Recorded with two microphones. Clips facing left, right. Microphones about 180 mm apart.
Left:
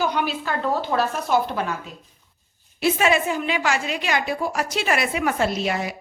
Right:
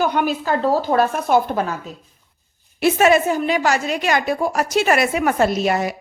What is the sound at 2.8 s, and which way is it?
A woman's voice, 45° right (ahead or behind).